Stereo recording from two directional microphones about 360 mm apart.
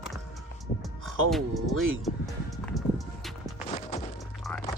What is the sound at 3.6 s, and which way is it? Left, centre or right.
Music, centre.